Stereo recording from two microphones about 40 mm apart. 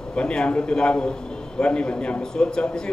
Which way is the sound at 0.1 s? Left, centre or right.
Left.